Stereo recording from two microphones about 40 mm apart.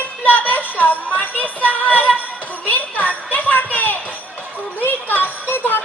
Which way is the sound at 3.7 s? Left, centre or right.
Left.